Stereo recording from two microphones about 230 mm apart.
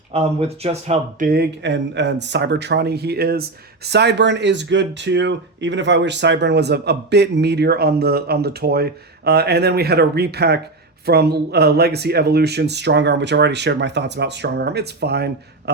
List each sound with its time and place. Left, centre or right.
0.1 s speech: right
1.3 s speech: right